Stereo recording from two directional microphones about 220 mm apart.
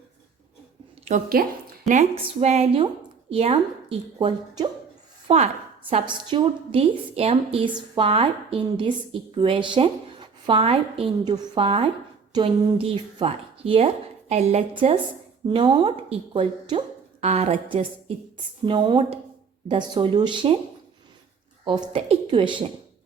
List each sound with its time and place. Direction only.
1.0 s a woman's voice: 40° right (ahead or behind); by 20.6 s 20° right (ahead or behind)
21.6 s a woman's voice: 20° right (ahead or behind)